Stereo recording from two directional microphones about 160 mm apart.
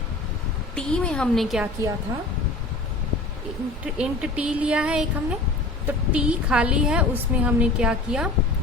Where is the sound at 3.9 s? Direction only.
5° right (ahead or behind).